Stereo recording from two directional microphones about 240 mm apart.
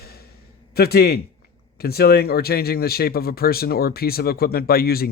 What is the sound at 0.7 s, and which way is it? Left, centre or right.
Speech, left.